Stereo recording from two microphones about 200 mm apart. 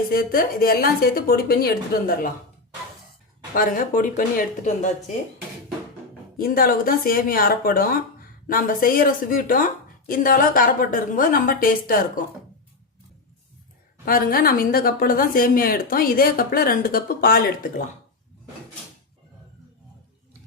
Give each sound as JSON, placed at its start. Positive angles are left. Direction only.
{"t": 0.1, "sound": "a woman's voice", "side_deg": 45}
{"t": 3.5, "sound": "a woman's voice", "side_deg": 45}
{"t": 6.3, "sound": "a woman's voice", "side_deg": 45}
{"t": 14.0, "sound": "a woman's voice", "side_deg": 45}